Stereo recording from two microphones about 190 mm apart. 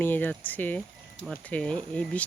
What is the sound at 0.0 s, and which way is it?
Speech, 10° left (ahead or behind).